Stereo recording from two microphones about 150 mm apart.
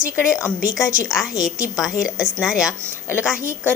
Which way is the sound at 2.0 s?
5° right (ahead or behind).